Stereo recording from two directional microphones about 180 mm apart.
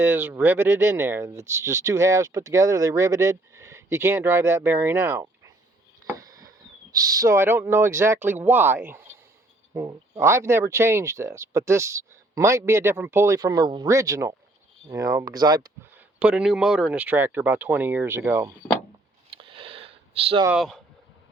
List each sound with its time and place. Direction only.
0.0 s speech: 10° right (ahead or behind)
6.1 s a sound: 20° right (ahead or behind)
6.9 s speech: 20° right (ahead or behind)
16.0 s speech: 5° right (ahead or behind)
19.4 s a sound: 30° right (ahead or behind)
20.5 s speech: centre (ahead or behind)